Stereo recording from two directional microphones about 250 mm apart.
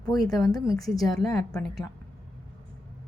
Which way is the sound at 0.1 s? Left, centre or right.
Centre.